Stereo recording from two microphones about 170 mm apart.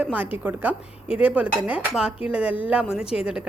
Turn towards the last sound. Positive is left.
turn(degrees=-5)  # may be behind; listen again after turning